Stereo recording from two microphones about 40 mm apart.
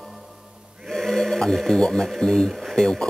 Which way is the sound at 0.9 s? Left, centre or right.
Centre.